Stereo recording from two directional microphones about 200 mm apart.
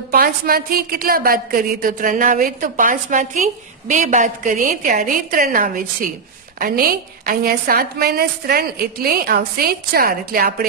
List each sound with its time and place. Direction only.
0.1 s a woman's voice: 45° right (ahead or behind)